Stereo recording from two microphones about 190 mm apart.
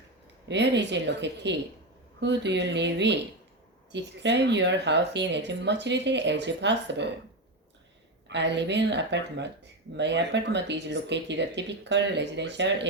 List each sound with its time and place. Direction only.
0.4 s speech: 65° right (ahead or behind)
8.3 s speech: 65° right (ahead or behind)